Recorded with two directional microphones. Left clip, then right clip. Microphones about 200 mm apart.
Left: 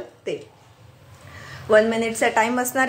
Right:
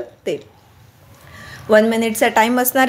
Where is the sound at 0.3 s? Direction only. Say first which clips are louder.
Right 5 dB; 45° right (ahead or behind).